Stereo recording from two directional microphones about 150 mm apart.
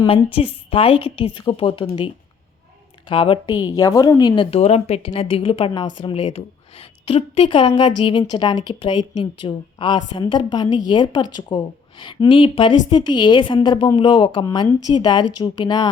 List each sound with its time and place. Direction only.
0.1 s a woman's voice: 40° left (ahead or behind)
3.1 s a woman's voice: 35° left (ahead or behind)
4.5 s a woman's voice: 45° left (ahead or behind)